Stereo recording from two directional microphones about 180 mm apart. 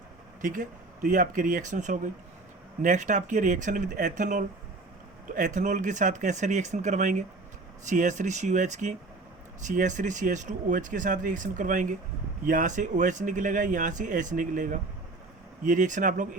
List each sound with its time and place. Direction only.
0.4 s speech: 50° right (ahead or behind)